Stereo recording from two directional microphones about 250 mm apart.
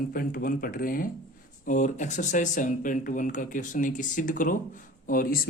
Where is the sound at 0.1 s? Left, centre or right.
Left.